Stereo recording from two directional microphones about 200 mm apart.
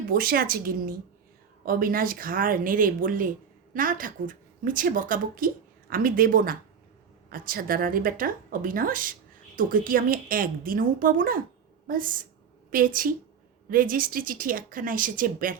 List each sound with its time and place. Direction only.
0.1 s speech: 45° right (ahead or behind)